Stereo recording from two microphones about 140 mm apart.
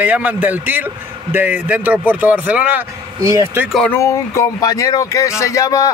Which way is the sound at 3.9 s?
20° left (ahead or behind).